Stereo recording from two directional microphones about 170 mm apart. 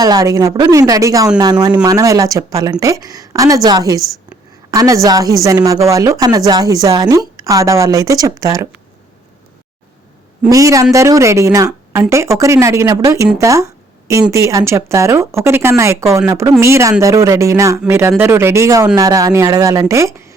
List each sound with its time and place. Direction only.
0.0 s a woman's voice: 20° right (ahead or behind)
10.5 s speech: 20° right (ahead or behind)